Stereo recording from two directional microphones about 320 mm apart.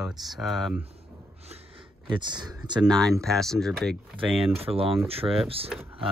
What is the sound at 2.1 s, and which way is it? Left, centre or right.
Speech, centre.